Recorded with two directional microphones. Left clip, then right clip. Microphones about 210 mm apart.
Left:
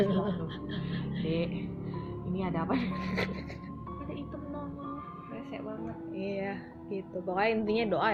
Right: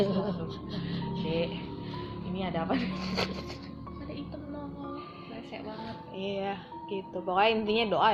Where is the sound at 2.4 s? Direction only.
45° left (ahead or behind).